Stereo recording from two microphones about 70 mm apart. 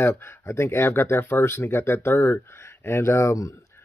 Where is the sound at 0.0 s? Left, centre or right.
Left.